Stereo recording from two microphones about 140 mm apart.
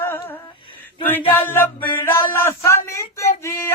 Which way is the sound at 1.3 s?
15° left (ahead or behind).